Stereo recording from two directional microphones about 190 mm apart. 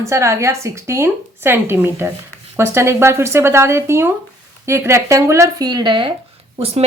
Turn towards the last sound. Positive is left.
turn(degrees=-30)  # may be behind; listen again after turning